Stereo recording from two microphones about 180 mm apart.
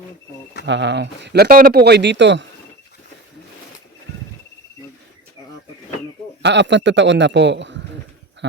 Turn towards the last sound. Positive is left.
turn(degrees=-80)